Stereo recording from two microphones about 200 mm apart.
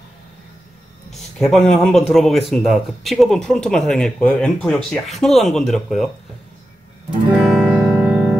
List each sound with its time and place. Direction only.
1.1 s speech: centre (ahead or behind)
7.2 s music: 5° right (ahead or behind)